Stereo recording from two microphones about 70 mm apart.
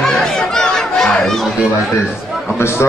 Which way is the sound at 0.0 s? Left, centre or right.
Centre.